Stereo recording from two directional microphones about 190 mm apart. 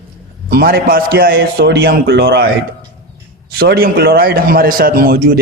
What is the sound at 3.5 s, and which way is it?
A man's voice, 55° right (ahead or behind).